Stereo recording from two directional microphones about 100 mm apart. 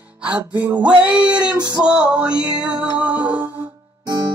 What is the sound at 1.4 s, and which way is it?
Music, 45° right (ahead or behind).